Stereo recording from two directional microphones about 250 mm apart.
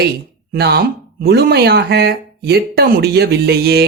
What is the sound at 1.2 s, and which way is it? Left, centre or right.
Speech, right.